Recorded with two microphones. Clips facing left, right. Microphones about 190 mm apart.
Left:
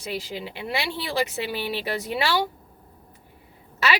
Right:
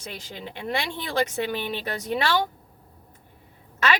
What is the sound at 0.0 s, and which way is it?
Speech, 10° left (ahead or behind).